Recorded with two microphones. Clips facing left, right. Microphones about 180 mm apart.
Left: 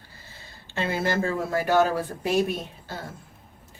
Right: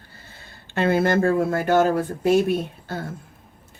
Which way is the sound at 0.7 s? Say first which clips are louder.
Right 7 dB; 55° right (ahead or behind).